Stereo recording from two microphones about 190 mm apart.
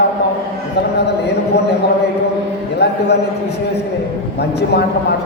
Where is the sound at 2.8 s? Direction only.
60° left (ahead or behind).